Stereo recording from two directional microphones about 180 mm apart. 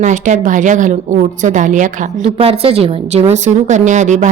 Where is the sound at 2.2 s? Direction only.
30° right (ahead or behind).